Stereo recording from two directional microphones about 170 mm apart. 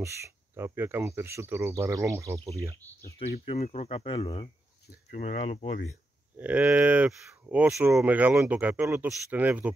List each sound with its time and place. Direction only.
0.0 s speech: 15° right (ahead or behind)
2.8 s speech: 15° left (ahead or behind)
3.2 s speech: 40° left (ahead or behind)
6.3 s speech: 10° right (ahead or behind)